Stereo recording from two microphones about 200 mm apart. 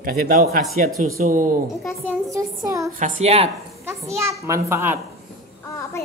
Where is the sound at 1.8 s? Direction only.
Centre (ahead or behind).